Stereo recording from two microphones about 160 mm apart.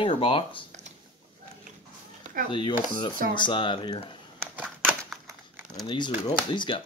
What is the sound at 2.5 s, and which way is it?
Speech, 30° left (ahead or behind).